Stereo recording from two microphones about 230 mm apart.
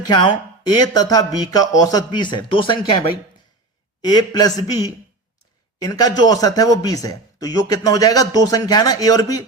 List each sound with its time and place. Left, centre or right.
0.7 s speech: centre
4.0 s speech: centre